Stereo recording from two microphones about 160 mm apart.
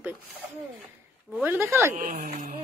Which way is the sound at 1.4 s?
15° right (ahead or behind).